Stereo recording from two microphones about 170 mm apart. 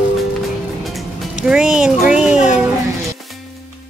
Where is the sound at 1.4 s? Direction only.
5° right (ahead or behind).